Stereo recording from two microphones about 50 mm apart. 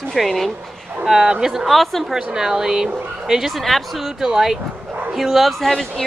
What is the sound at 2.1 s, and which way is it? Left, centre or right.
Speech, centre.